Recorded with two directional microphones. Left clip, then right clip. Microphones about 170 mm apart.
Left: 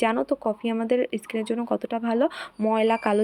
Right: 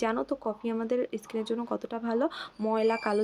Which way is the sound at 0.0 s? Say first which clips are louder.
Left 6 dB; 30° left (ahead or behind).